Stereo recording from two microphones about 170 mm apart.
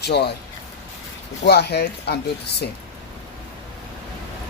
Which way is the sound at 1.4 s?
75° left (ahead or behind).